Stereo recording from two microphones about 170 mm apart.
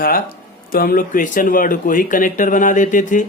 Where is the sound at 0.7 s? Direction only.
55° left (ahead or behind).